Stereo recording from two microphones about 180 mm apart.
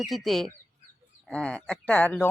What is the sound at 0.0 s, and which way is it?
Speech, centre (ahead or behind).